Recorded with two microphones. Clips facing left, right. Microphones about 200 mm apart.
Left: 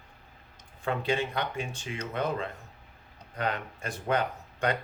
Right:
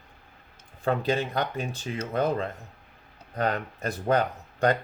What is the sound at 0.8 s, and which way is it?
Speech, 40° right (ahead or behind).